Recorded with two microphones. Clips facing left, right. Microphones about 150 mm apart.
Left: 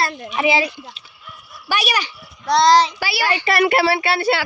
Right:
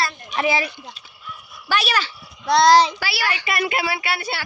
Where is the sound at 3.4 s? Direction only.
65° left (ahead or behind).